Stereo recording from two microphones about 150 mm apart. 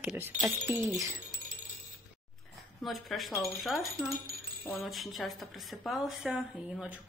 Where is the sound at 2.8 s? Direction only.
Centre (ahead or behind).